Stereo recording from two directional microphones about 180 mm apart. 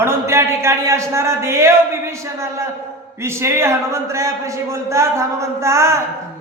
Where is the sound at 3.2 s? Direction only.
15° right (ahead or behind).